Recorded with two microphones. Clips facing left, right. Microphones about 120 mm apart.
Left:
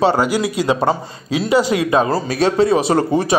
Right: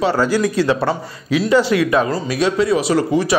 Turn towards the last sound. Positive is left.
turn(degrees=30)  # may be behind; listen again after turning